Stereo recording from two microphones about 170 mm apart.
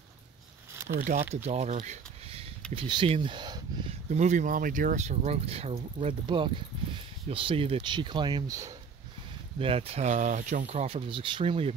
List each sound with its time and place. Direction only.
0.8 s speech: 55° right (ahead or behind)
1.3 s speech: 40° right (ahead or behind)
2.7 s speech: 30° right (ahead or behind)
4.1 s speech: 45° right (ahead or behind); by 8.7 s 20° right (ahead or behind)
9.6 s speech: 35° right (ahead or behind)